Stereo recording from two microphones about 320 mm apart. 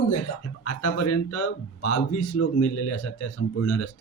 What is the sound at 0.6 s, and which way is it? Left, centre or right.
Speech, left.